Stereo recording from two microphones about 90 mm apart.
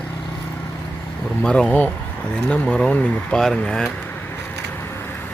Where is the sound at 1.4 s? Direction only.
10° left (ahead or behind).